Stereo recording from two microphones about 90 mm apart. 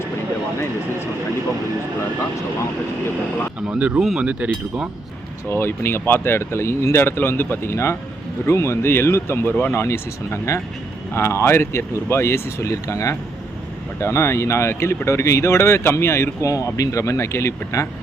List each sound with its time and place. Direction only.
3.7 s speech: 15° right (ahead or behind)
5.5 s speech: 25° left (ahead or behind)